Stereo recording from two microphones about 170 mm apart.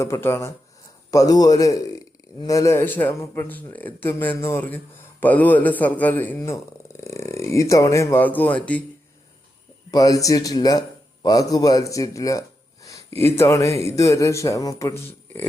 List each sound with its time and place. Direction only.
0.0 s a man's voice: 15° left (ahead or behind)
9.9 s a man's voice: 20° left (ahead or behind)